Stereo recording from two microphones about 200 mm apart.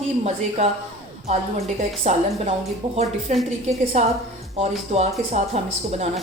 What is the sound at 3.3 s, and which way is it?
Speech, 35° right (ahead or behind).